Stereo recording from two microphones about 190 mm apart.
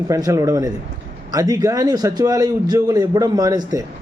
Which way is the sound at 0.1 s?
15° right (ahead or behind).